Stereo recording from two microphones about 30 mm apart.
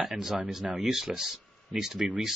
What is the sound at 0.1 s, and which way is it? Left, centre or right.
Speech, centre.